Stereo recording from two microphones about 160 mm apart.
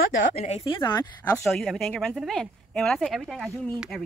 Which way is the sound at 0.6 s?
30° left (ahead or behind).